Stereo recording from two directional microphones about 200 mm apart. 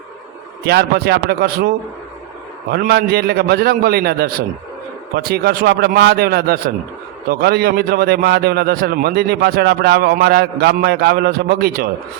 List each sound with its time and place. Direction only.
0.6 s a man's voice: 50° right (ahead or behind)